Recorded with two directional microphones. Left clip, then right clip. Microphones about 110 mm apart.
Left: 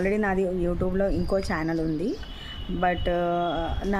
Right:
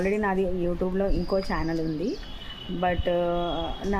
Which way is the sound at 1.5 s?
40° left (ahead or behind).